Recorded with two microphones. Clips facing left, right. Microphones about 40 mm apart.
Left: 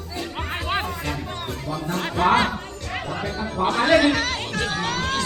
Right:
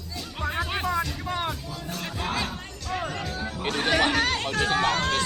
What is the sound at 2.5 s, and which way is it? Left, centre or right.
Music, left.